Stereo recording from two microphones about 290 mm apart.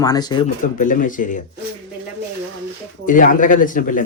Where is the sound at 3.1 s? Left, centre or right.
Left.